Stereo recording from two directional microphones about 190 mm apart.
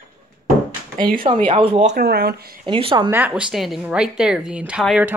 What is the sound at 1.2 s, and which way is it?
Speech, 30° right (ahead or behind).